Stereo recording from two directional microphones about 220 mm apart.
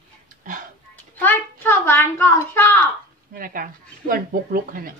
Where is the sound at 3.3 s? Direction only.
40° right (ahead or behind).